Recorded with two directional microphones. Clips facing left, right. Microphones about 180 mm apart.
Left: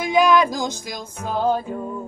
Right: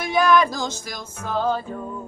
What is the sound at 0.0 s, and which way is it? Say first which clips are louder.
Music: left 2 dB; 15° left (ahead or behind).